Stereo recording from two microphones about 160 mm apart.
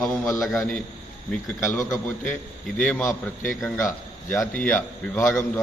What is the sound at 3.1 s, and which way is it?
Speech, 55° left (ahead or behind).